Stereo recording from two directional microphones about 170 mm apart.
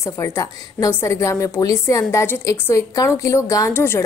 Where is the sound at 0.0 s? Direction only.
15° left (ahead or behind).